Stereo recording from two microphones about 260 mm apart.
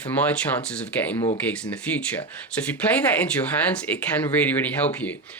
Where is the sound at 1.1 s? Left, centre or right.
Left.